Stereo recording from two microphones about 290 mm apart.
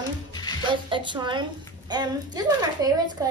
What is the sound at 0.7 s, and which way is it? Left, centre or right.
A woman's voice, centre.